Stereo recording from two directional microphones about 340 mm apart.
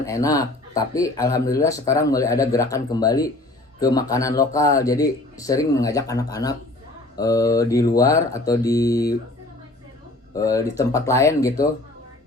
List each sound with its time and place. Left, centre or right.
0.0 s speech: centre
10.3 s speech: centre